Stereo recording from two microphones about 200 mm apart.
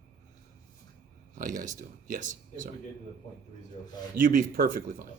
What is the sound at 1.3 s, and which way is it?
Speech, 40° right (ahead or behind).